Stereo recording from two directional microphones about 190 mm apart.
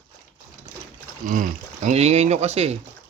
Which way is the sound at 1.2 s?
45° right (ahead or behind).